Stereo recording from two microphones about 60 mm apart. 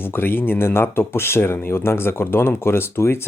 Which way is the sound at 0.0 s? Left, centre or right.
Left.